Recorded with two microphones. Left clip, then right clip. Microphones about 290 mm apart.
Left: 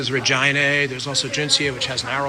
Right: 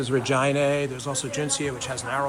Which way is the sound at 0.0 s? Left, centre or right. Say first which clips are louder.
Left 4 dB; centre.